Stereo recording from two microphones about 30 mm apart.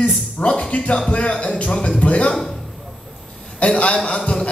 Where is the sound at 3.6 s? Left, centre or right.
Left.